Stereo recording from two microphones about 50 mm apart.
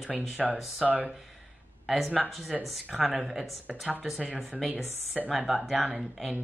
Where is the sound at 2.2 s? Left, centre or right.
Centre.